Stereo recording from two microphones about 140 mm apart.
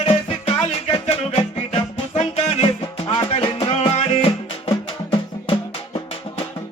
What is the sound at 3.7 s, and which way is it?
Music, 50° left (ahead or behind).